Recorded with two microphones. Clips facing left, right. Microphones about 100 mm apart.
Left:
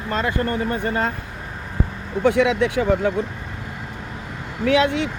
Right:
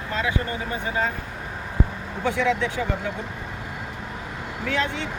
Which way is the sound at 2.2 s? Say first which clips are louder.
Left 6 dB; 75° left (ahead or behind).